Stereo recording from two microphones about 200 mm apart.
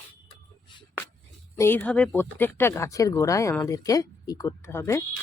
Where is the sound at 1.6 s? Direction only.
10° left (ahead or behind).